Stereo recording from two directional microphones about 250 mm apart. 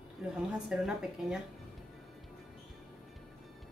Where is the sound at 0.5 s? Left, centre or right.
Centre.